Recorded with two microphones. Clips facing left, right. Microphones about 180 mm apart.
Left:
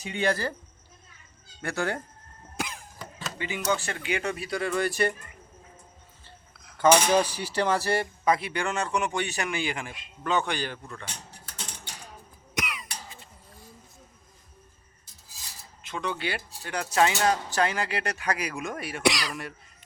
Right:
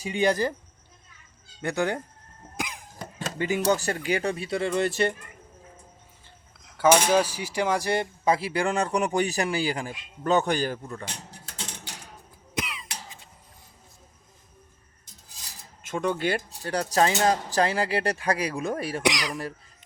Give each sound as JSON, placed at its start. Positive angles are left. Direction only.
{"t": 0.0, "sound": "speech", "side_deg": -15}
{"t": 1.6, "sound": "speech", "side_deg": -20}
{"t": 2.6, "sound": "cough", "side_deg": -15}
{"t": 3.2, "sound": "a sound", "side_deg": -45}
{"t": 3.6, "sound": "speech", "side_deg": -40}
{"t": 6.7, "sound": "speech", "side_deg": -10}
{"t": 12.5, "sound": "cough", "side_deg": -25}
{"t": 15.8, "sound": "speech", "side_deg": -45}
{"t": 19.0, "sound": "speech", "side_deg": -15}